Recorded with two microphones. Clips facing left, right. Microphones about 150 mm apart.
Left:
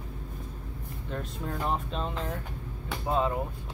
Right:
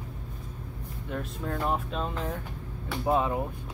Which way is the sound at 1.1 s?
5° right (ahead or behind).